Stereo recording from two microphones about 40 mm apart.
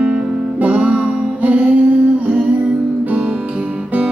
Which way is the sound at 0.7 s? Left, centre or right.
Right.